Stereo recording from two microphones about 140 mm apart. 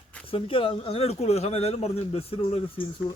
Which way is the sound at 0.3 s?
40° left (ahead or behind).